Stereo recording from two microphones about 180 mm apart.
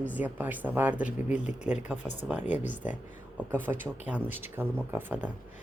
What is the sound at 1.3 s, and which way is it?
Speech, 40° left (ahead or behind).